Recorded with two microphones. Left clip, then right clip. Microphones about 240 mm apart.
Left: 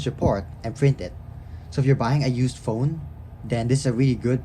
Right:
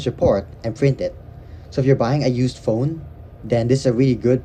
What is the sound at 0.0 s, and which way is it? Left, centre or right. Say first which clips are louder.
Speech: right 7 dB; centre.